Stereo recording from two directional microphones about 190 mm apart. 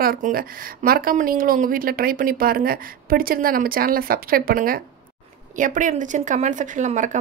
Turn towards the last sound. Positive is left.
turn(degrees=-40)  # may be behind; listen again after turning